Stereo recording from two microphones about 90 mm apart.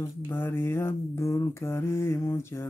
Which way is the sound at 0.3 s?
25° left (ahead or behind).